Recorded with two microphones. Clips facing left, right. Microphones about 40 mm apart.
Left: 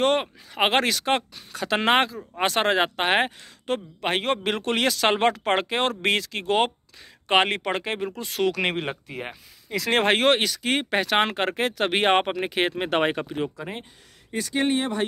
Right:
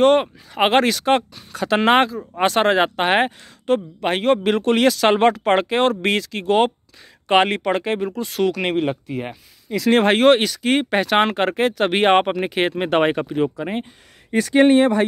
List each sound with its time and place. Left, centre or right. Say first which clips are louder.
0.0 s speech: right 7 dB; centre
3.6 s speech: right 7 dB; centre
5.4 s speech: right 6 dB; centre
6.2 s speech: right 5 dB; centre
8.5 s speech: right 3 dB; left
8.8 s speech: right 8 dB; left
9.7 s speech: right 6 dB; left
10.0 s speech: right 5 dB; centre
10.3 s speech: right 6 dB; centre; by 13.3 s right
13.4 s speech: right 8 dB; right
14.3 s speech: right 10 dB; right